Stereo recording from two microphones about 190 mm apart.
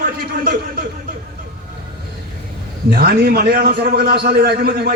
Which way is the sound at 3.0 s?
55° right (ahead or behind).